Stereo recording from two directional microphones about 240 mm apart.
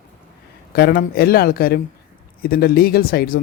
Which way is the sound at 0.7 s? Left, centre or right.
Left.